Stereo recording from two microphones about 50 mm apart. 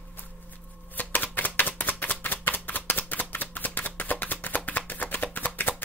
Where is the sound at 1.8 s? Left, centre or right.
Left.